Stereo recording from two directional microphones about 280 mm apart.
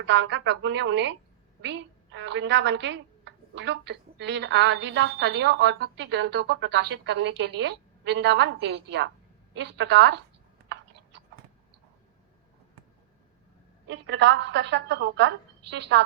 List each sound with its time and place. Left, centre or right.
0.1 s a woman's voice: right
2.1 s a woman's voice: right
13.8 s a woman's voice: right